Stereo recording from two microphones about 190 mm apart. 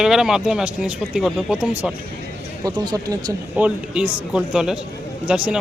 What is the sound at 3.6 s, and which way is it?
Speech, 5° right (ahead or behind).